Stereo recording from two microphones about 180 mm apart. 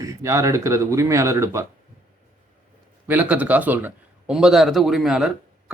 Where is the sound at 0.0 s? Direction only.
15° right (ahead or behind).